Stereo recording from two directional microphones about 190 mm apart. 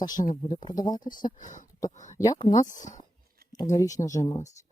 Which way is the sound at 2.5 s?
40° left (ahead or behind).